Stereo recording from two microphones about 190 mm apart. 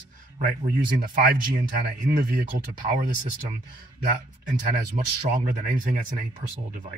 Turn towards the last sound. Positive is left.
turn(degrees=-45)  # may be behind; listen again after turning